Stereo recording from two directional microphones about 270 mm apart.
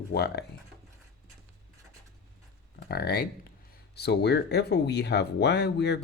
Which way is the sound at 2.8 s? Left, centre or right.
Left.